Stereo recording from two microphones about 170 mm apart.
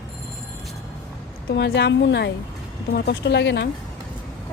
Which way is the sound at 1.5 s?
90° left.